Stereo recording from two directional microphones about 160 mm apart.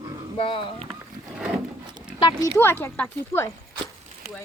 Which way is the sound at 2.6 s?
15° left (ahead or behind).